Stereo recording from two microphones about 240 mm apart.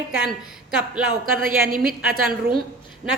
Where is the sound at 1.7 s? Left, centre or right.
Right.